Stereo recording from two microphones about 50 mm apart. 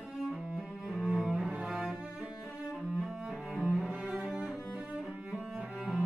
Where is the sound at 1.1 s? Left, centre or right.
Centre.